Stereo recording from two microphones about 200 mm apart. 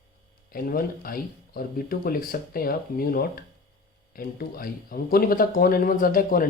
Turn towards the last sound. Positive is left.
turn(degrees=45)  # may be behind; listen again after turning